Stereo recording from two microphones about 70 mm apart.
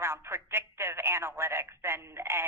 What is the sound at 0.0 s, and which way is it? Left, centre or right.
Speech, right.